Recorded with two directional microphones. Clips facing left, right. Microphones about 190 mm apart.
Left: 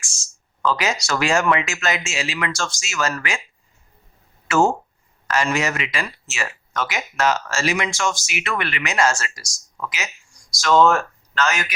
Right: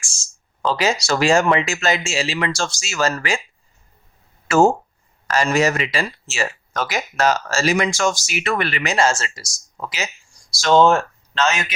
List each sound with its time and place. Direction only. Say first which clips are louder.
0.6 s speech: right 2 dB; 30° right (ahead or behind)
4.4 s speech: right 3 dB; 35° right (ahead or behind)